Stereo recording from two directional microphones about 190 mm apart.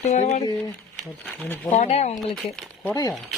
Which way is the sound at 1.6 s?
35° left (ahead or behind).